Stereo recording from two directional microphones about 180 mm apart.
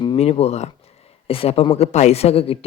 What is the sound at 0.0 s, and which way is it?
Speech, 30° left (ahead or behind).